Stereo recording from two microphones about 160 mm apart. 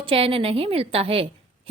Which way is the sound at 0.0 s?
35° right (ahead or behind).